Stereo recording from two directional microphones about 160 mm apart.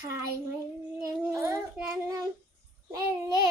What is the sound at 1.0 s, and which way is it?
Child singing, 20° right (ahead or behind).